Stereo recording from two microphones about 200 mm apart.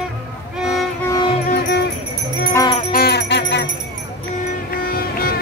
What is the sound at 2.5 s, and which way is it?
Music, 20° left (ahead or behind).